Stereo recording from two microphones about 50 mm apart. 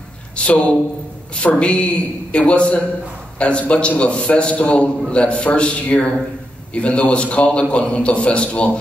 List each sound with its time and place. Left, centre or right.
0.4 s a man's voice: left